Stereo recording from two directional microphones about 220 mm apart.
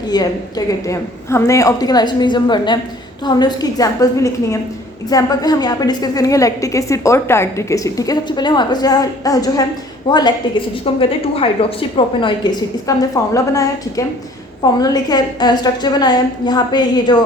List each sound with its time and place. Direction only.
0.1 s a woman's voice: 15° left (ahead or behind)